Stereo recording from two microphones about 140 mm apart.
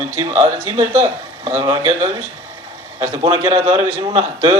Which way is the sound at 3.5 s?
40° right (ahead or behind).